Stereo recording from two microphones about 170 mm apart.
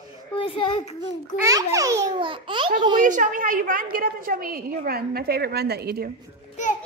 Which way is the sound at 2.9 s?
50° right (ahead or behind).